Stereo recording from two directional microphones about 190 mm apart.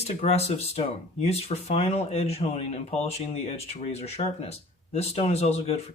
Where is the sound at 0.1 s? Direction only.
35° left (ahead or behind).